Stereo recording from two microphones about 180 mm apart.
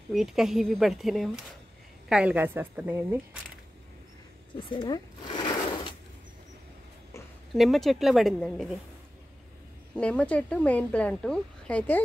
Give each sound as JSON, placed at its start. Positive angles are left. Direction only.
{"t": 0.1, "sound": "a woman's voice", "side_deg": 0}
{"t": 4.6, "sound": "a sound", "side_deg": 25}
{"t": 7.5, "sound": "speech", "side_deg": 0}
{"t": 9.9, "sound": "a woman's voice", "side_deg": 5}